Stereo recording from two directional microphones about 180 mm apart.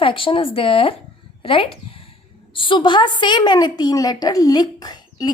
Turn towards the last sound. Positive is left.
turn(degrees=20)  # may be behind; listen again after turning